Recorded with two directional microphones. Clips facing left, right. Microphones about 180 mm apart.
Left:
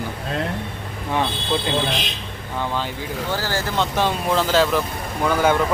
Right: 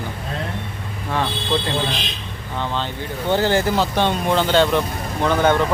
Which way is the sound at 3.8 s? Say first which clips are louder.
Right 2 dB; centre (ahead or behind).